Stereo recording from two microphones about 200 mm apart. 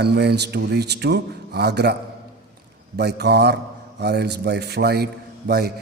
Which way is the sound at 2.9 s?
55° right (ahead or behind).